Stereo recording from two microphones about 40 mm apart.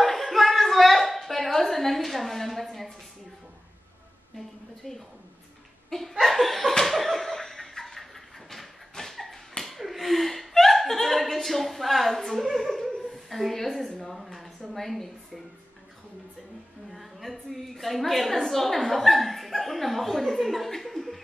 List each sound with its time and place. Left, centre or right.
0.0 s a sound: centre
4.4 s a woman's voice: centre
5.9 s laughter: centre
6.1 s a woman's voice: centre
6.8 s a sound: centre
9.1 s dog: centre
9.6 s chuckle: centre
12.5 s a sound: centre
14.0 s speech: centre
16.9 s a woman's voice: centre